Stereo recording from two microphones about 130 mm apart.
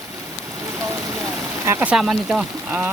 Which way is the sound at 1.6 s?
20° right (ahead or behind).